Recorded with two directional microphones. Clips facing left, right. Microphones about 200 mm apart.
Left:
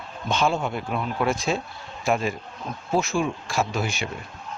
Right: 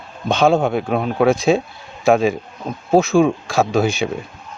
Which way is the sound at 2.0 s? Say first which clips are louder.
Right 10 dB; 90° right.